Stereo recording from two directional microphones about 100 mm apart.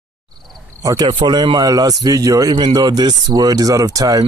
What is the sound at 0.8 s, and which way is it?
Speech, 45° right (ahead or behind).